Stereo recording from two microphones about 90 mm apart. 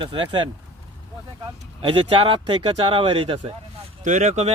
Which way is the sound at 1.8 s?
75° right (ahead or behind).